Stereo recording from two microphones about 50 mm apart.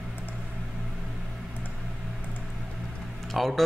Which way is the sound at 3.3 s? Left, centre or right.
Centre.